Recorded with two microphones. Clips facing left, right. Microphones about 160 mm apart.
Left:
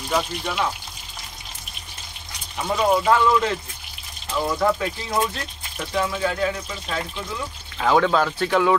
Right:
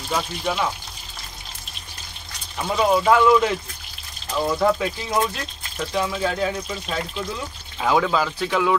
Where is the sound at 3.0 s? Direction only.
10° right (ahead or behind).